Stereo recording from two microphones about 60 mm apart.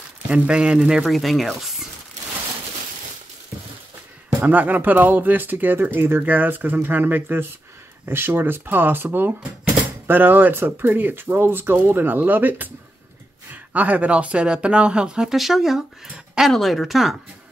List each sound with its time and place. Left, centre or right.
0.3 s speech: centre
4.5 s speech: right; by 17.2 s centre